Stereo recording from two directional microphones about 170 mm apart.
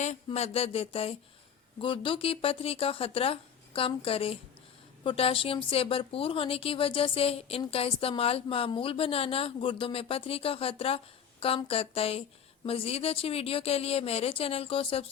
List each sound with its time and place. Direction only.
0.3 s a woman's voice: 35° left (ahead or behind)